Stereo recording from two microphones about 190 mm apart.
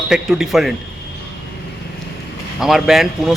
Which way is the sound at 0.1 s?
Centre (ahead or behind).